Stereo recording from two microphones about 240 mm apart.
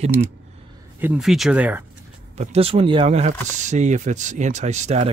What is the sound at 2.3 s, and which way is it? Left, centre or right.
Speech, right.